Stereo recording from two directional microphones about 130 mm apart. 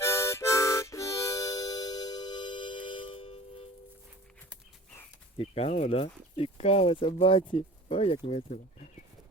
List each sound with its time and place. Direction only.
0.0 s harmonica: 20° left (ahead or behind); by 3.7 s 50° left (ahead or behind)
5.4 s speech: 50° left (ahead or behind)